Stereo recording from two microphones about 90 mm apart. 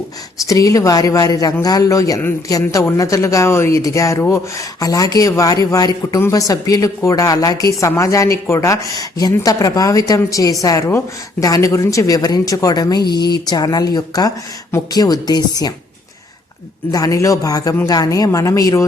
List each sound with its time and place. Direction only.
0.4 s speech: 40° left (ahead or behind)
6.1 s speech: 30° left (ahead or behind)
6.5 s speech: 40° left (ahead or behind)
16.9 s speech: 40° left (ahead or behind)